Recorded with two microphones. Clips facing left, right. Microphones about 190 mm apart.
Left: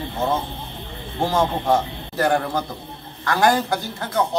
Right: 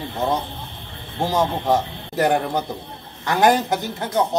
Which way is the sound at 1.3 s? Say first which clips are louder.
Even; 20° right (ahead or behind).